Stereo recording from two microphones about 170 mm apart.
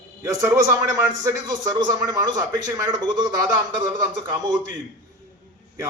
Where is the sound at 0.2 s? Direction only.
20° right (ahead or behind).